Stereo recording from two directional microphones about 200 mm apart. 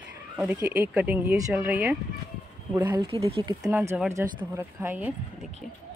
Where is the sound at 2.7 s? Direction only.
20° right (ahead or behind).